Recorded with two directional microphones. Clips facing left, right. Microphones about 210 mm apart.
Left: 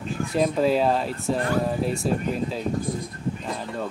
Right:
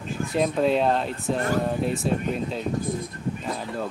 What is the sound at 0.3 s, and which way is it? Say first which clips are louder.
Speech: left 1 dB; centre (ahead or behind).